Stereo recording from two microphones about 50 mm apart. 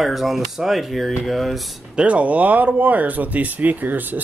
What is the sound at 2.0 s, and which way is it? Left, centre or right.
Speech, right.